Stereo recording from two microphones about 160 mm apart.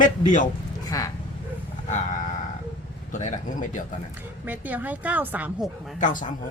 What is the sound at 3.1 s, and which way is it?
Speech, 50° left (ahead or behind).